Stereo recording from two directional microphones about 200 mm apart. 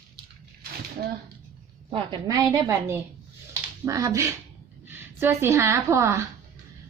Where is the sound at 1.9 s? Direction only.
20° right (ahead or behind).